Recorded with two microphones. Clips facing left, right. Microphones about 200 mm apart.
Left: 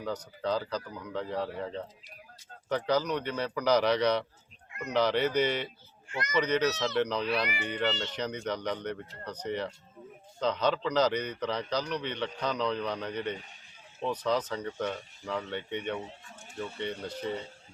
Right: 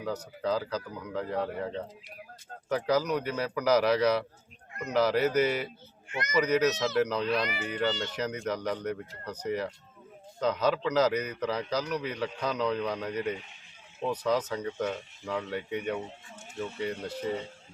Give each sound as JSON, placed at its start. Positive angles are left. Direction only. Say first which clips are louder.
{"t": 0.0, "sound": "a man's voice", "louder": "right 1 dB", "side_deg": -5}
{"t": 6.1, "sound": "a child's voice", "louder": "right 1 dB", "side_deg": -20}
{"t": 6.3, "sound": "a man's voice", "louder": "right 2 dB", "side_deg": -5}
{"t": 7.3, "sound": "speech", "louder": "right 1 dB", "side_deg": 10}
{"t": 7.6, "sound": "a man's voice", "louder": "right 1 dB", "side_deg": -5}